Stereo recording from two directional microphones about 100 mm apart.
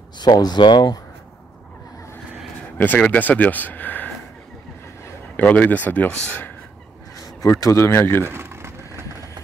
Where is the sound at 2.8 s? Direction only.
15° left (ahead or behind).